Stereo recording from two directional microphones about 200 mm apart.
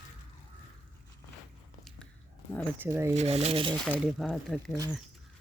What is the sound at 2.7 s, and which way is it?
Speech, 10° right (ahead or behind).